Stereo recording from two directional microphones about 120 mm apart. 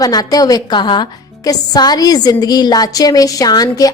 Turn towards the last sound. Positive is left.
turn(degrees=30)  # may be behind; listen again after turning